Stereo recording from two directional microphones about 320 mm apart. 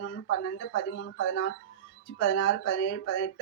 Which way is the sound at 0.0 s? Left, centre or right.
Left.